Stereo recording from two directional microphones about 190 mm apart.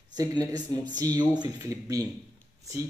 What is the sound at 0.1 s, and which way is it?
A man's voice, 20° right (ahead or behind).